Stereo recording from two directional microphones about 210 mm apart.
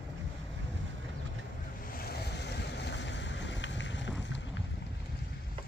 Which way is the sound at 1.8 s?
45° left (ahead or behind).